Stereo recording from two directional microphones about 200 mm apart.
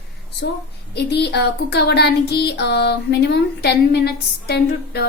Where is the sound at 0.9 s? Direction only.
55° left (ahead or behind).